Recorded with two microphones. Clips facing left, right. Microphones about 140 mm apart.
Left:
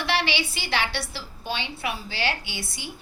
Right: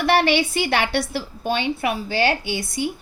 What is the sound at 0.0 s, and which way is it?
A woman's voice, 50° right (ahead or behind).